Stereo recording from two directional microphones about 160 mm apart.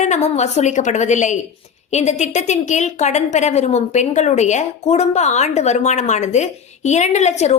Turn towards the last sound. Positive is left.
turn(degrees=45)  # may be behind; listen again after turning